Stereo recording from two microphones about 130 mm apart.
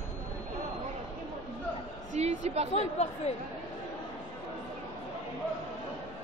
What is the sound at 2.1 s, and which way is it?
Speech, 60° right (ahead or behind).